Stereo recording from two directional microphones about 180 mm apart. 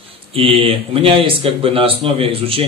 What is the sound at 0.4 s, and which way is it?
Speech, 30° right (ahead or behind).